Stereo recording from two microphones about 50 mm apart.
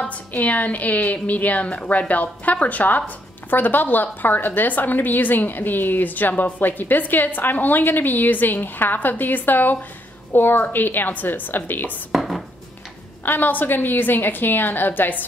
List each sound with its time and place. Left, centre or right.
0.1 s a woman's voice: left
12.1 s dishes: centre
13.2 s a woman's voice: left